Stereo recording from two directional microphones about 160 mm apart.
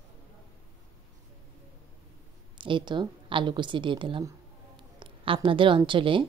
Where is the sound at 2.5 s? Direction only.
30° right (ahead or behind).